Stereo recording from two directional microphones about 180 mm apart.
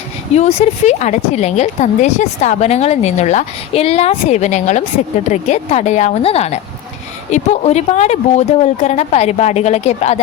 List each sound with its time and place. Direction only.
0.3 s a woman's voice: 35° left (ahead or behind)